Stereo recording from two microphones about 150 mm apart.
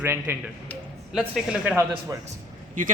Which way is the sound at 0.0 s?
15° right (ahead or behind).